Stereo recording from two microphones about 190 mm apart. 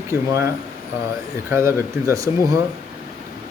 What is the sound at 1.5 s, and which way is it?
Speech, 15° right (ahead or behind).